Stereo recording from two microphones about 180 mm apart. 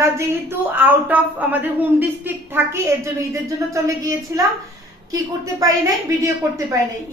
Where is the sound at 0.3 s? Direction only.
10° right (ahead or behind).